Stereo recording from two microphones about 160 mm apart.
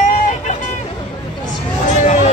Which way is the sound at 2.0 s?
45° left (ahead or behind).